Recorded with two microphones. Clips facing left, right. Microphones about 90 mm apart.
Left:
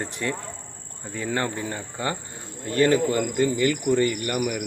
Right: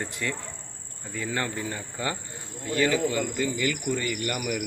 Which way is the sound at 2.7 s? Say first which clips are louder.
Left 4 dB; 45° left (ahead or behind).